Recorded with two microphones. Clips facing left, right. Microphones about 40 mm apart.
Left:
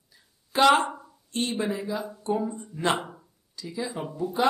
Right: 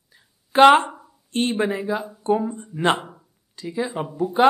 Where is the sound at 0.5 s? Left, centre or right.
Right.